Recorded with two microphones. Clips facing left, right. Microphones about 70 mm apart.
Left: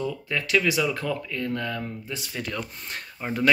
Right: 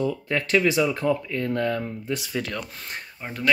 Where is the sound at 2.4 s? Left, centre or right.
Right.